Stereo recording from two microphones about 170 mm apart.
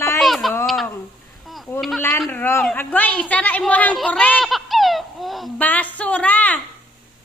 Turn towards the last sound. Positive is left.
turn(degrees=10)  # may be behind; listen again after turning